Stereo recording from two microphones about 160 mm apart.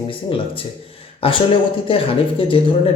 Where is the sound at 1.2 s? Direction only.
35° left (ahead or behind).